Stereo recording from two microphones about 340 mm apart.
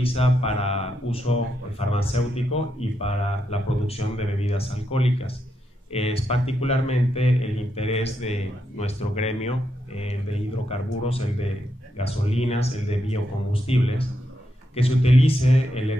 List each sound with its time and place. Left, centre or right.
0.0 s a man's voice: centre